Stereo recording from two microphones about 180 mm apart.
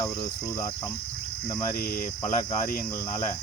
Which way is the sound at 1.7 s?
55° left (ahead or behind).